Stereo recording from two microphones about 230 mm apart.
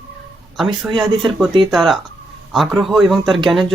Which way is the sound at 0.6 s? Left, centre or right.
Centre.